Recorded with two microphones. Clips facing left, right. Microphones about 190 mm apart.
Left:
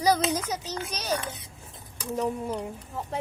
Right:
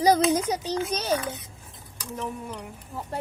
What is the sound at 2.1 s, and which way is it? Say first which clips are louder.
Speech: left 5 dB; 20° left (ahead or behind).